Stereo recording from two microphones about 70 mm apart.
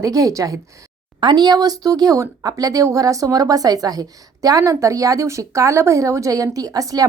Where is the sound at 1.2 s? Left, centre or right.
Right.